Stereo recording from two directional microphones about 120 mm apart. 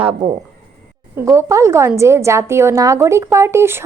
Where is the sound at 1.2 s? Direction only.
25° right (ahead or behind).